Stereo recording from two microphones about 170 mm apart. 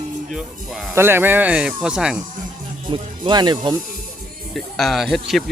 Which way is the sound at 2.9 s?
25° right (ahead or behind).